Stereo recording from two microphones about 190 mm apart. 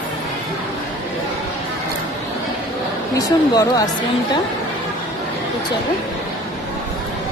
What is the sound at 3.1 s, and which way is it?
Speech, 20° left (ahead or behind).